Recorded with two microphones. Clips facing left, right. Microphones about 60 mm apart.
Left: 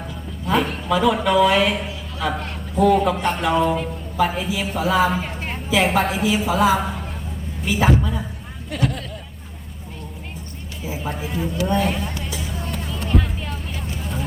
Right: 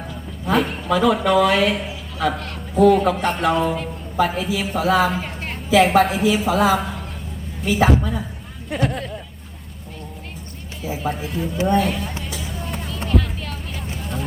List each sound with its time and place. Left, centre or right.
0.5 s a woman's voice: centre
8.7 s a sound: right
10.9 s music: centre
11.6 s a woman's voice: centre
12.4 s music: centre
13.1 s a sound: centre